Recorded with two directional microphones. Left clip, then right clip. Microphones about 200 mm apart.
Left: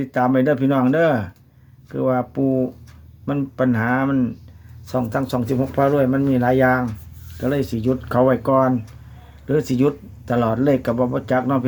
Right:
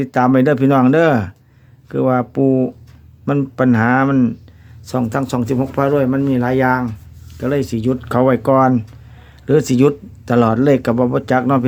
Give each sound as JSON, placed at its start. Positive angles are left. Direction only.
{"t": 0.0, "sound": "speech", "side_deg": -50}
{"t": 4.9, "sound": "speech", "side_deg": -40}